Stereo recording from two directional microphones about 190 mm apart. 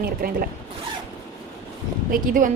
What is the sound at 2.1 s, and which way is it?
Speech, 45° right (ahead or behind).